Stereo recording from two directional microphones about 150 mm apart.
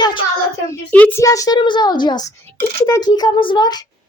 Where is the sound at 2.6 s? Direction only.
20° left (ahead or behind).